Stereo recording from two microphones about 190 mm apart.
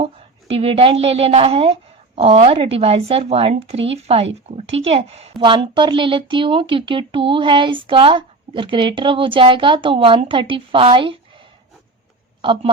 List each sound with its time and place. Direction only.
0.0 s a woman's voice: 30° right (ahead or behind)
12.4 s speech: 25° right (ahead or behind)